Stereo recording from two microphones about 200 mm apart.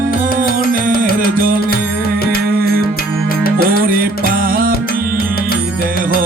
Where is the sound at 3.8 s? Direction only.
45° right (ahead or behind).